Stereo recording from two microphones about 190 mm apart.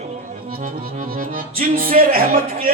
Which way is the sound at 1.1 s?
50° right (ahead or behind).